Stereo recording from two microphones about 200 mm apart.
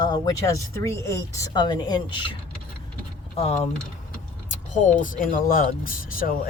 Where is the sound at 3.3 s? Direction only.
35° left (ahead or behind).